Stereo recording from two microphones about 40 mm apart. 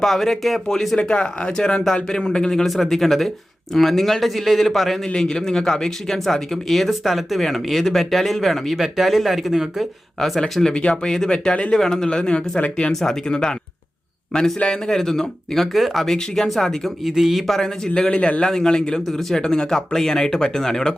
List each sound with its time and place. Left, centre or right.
0.0 s speech: centre
0.9 s speech: left
2.6 s speech: centre
5.0 s speech: centre
10.2 s speech: centre
12.0 s speech: left
12.9 s speech: centre
13.2 s speech: left; by 16.0 s centre
16.0 s speech: centre
17.0 s speech: centre
17.4 s speech: centre; by 18.4 s left
18.4 s speech: centre